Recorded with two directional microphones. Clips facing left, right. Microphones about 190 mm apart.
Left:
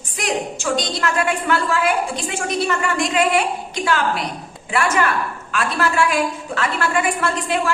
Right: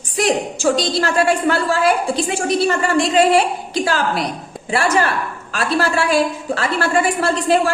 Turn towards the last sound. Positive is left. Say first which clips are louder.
# right 5 dB
turn(degrees=-35)  # may be behind; listen again after turning